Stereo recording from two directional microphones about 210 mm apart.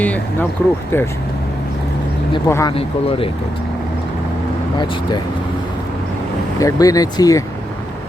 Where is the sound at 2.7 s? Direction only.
25° left (ahead or behind).